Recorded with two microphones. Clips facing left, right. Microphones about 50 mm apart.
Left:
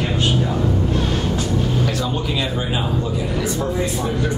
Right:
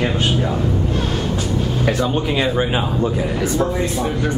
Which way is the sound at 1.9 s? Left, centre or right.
Right.